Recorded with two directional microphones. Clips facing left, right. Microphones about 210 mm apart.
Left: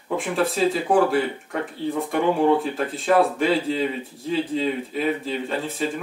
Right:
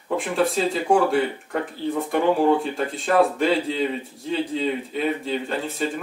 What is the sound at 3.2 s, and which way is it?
Speech, centre (ahead or behind).